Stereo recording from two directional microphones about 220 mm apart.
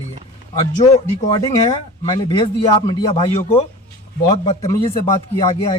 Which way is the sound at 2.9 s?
20° left (ahead or behind).